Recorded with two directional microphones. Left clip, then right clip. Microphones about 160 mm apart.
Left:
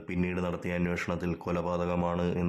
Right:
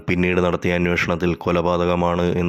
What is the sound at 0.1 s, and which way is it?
Speech, 40° right (ahead or behind).